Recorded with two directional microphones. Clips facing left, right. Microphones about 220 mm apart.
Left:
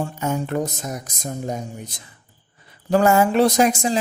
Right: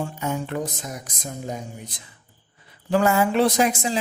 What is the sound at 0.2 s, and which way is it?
Speech, 45° left (ahead or behind).